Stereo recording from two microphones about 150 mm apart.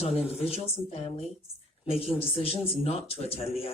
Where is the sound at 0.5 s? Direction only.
40° left (ahead or behind).